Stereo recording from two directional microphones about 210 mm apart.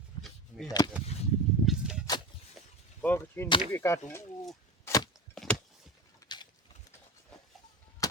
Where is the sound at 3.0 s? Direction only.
10° left (ahead or behind).